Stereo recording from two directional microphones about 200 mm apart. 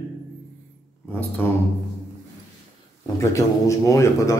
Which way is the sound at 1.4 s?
10° left (ahead or behind).